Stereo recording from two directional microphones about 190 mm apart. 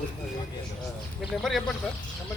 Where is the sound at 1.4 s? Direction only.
Centre (ahead or behind).